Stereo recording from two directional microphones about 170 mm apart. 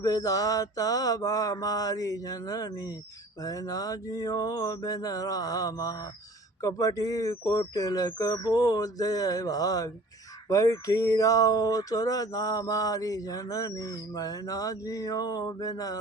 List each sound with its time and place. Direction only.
0.0 s speech: 20° left (ahead or behind)